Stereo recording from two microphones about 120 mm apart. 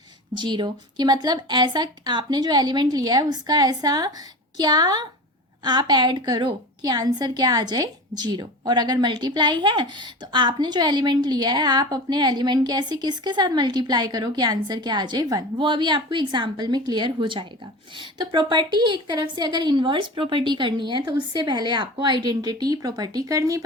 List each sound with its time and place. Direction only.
0.3 s a woman's voice: 40° right (ahead or behind)